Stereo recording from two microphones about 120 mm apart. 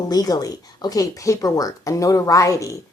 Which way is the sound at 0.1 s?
30° left (ahead or behind).